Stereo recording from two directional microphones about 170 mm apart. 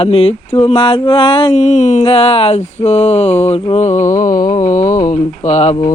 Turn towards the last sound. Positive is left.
turn(degrees=40)  # may be behind; listen again after turning